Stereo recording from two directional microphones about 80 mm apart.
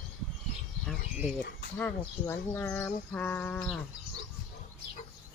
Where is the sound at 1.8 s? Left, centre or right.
Left.